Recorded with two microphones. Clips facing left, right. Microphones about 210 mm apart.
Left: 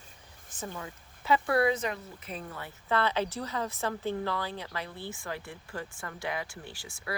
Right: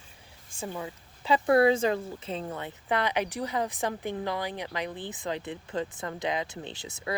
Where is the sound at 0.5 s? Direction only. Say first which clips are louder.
Right 4 dB; 15° right (ahead or behind).